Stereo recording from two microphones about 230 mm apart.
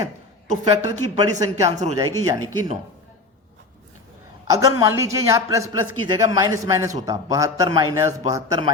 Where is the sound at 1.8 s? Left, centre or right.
Right.